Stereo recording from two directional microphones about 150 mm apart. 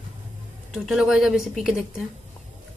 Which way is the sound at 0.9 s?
5° right (ahead or behind).